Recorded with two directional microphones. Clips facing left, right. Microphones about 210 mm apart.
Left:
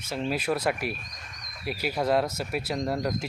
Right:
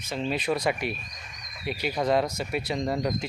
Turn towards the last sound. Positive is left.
turn(degrees=0)  # may be behind; listen again after turning